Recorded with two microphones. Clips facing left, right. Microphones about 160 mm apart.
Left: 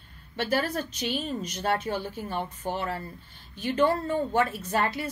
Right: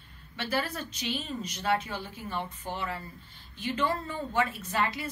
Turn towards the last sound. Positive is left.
turn(degrees=45)  # may be behind; listen again after turning